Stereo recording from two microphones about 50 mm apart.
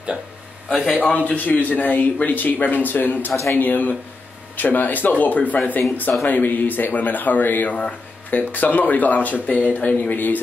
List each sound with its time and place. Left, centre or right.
1.0 s a man's voice: left